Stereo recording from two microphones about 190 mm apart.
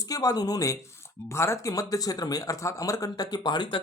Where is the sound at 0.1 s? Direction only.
20° left (ahead or behind).